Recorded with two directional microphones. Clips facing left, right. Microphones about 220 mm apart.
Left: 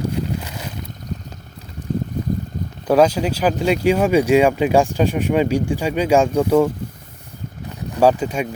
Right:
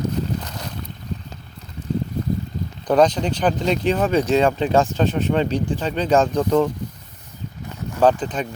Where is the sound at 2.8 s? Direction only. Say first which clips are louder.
Left 2 dB; 5° left (ahead or behind).